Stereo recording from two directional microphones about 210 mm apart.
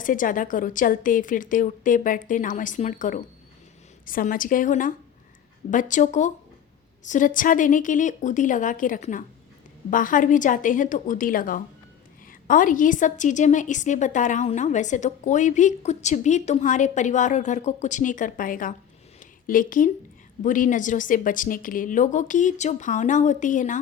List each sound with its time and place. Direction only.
0.0 s a woman's voice: 40° left (ahead or behind)
19.2 s a sound: 40° left (ahead or behind)
20.4 s a woman's voice: 40° left (ahead or behind)